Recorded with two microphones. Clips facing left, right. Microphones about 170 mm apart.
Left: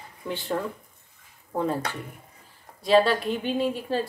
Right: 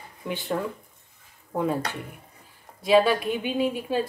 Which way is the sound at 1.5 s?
5° right (ahead or behind).